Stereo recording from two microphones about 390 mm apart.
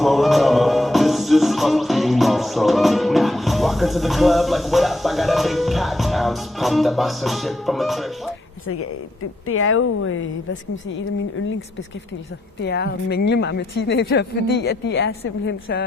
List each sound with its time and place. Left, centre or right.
0.0 s music: centre
8.6 s speech: left
12.6 s speech: left